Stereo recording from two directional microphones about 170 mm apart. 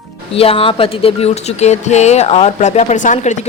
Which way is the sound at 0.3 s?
35° left (ahead or behind).